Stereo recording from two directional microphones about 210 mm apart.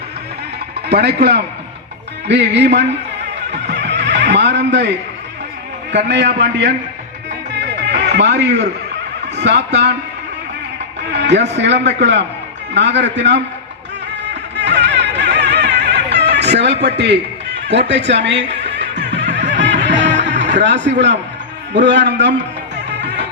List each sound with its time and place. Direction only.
0.9 s a man's voice: 50° right (ahead or behind)
3.5 s neigh: 55° right (ahead or behind)
5.9 s a man's voice: 55° right (ahead or behind)
7.9 s a sound: 55° right (ahead or behind)
9.3 s a man's voice: 55° right (ahead or behind)
11.1 s a man's voice: 55° right (ahead or behind)
14.5 s music: 55° right (ahead or behind)
21.7 s a man's voice: 55° right (ahead or behind)
22.9 s music: 55° right (ahead or behind)